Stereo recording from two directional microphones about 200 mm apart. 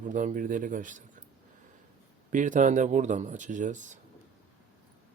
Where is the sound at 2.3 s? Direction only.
40° right (ahead or behind).